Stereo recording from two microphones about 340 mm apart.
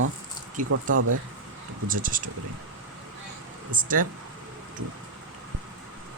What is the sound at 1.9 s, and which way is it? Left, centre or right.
Speech, right.